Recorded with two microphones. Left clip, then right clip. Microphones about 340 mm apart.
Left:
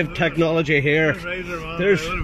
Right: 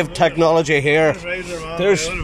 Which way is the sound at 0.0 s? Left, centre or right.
Centre.